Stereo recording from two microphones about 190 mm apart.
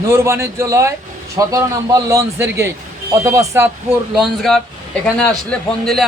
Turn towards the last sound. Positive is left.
turn(degrees=5)  # may be behind; listen again after turning